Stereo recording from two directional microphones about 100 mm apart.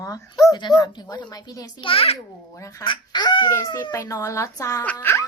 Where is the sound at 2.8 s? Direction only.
50° left (ahead or behind).